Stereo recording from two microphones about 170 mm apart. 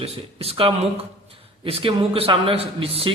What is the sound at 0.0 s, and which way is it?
Speech, 35° right (ahead or behind).